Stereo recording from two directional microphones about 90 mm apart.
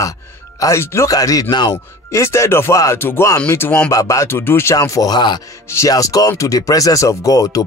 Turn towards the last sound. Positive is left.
turn(degrees=40)  # may be behind; listen again after turning